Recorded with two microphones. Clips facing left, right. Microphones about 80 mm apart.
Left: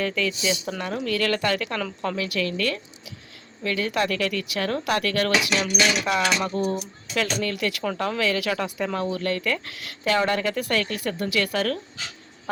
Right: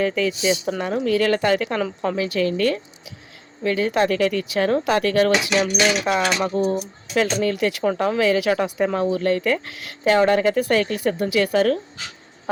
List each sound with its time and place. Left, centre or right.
0.0 s speech: right
5.5 s speech: right